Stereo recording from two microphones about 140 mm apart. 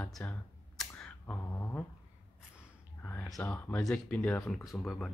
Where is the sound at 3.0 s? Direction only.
10° left (ahead or behind).